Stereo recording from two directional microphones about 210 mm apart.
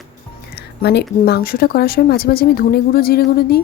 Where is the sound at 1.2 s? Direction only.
45° left (ahead or behind).